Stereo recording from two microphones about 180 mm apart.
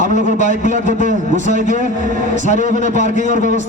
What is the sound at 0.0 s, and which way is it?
A man's voice, 45° right (ahead or behind).